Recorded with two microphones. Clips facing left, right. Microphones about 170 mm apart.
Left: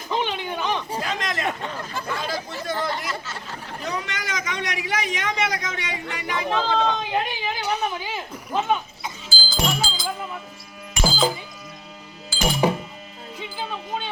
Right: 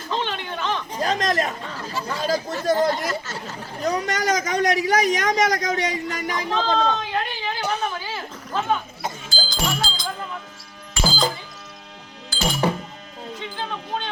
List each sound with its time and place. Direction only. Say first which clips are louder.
0.1 s a sound: left 1 dB; 15° left (ahead or behind)
1.0 s speech: right 10 dB; 40° right (ahead or behind)
6.7 s whimper: even; 15° left (ahead or behind)
7.8 s speech: even; 20° left (ahead or behind)
9.0 s goat: right 4 dB; 50° right (ahead or behind)
9.3 s music: left 2 dB; 5° left (ahead or behind)
11.0 s music: even; 15° left (ahead or behind)
12.3 s music: left 1 dB; 10° left (ahead or behind)